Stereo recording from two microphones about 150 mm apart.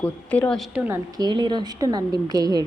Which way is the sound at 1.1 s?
30° right (ahead or behind).